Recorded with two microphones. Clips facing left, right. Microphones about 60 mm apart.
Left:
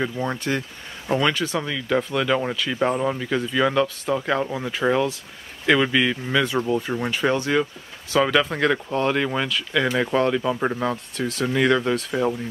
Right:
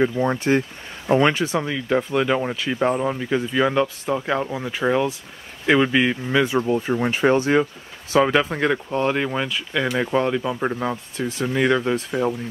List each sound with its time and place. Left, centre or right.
0.0 s speech: centre
2.8 s speech: centre
3.3 s speech: centre
5.7 s speech: centre
11.1 s speech: centre
12.1 s speech: centre